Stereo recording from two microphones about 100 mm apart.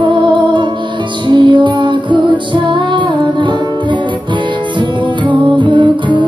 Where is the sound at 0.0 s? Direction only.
55° right (ahead or behind).